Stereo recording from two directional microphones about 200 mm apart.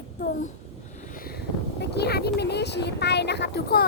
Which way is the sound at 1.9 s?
55° left (ahead or behind).